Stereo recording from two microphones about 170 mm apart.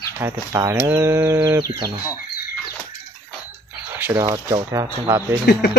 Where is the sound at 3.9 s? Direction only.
10° right (ahead or behind).